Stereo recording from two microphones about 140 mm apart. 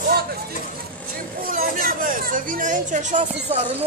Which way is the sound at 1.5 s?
90° right.